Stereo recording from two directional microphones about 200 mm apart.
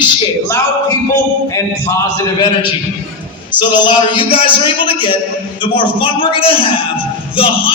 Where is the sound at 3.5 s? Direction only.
25° left (ahead or behind).